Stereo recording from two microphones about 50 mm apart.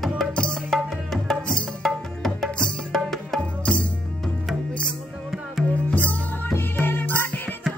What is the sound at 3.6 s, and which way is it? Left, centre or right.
Music, left.